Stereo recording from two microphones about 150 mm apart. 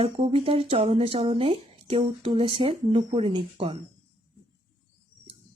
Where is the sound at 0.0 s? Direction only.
40° right (ahead or behind).